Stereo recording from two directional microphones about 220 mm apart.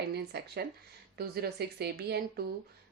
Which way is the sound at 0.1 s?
45° right (ahead or behind).